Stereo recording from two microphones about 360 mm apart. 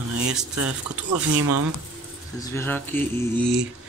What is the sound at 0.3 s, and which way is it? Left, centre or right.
Speech, centre.